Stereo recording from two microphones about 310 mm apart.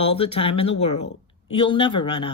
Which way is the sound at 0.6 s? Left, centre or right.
Left.